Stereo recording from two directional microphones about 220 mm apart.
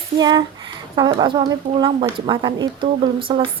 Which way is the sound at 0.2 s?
20° right (ahead or behind).